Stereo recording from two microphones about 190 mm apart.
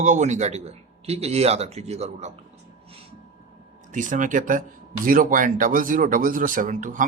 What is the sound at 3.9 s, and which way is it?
Speech, 40° right (ahead or behind).